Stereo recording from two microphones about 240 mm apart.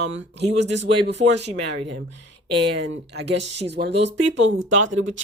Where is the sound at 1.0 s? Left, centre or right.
Right.